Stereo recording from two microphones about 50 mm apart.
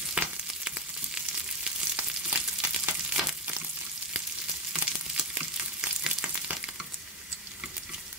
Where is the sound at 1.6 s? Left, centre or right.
Right.